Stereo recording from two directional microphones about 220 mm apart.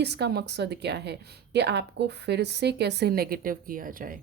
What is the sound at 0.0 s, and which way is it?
A woman's voice, 50° right (ahead or behind).